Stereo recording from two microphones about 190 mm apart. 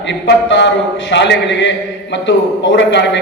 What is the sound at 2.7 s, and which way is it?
Speech, 70° left (ahead or behind).